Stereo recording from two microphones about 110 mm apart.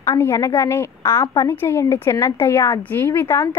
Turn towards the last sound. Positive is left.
turn(degrees=25)  # may be behind; listen again after turning